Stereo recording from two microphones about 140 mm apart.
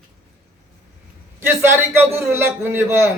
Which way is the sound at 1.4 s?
15° right (ahead or behind).